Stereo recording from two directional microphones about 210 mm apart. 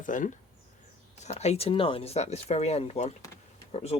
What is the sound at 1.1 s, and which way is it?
Speech, 30° left (ahead or behind).